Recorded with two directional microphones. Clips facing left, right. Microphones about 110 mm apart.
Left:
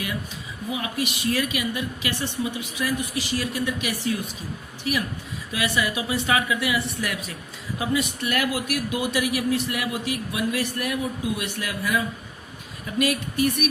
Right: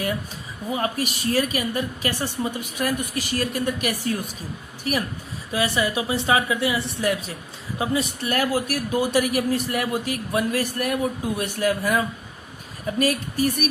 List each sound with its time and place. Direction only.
0.7 s a woman's voice: 40° right (ahead or behind)
5.5 s a woman's voice: 35° right (ahead or behind)